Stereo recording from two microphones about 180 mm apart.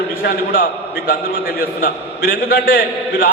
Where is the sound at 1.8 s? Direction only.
65° left (ahead or behind).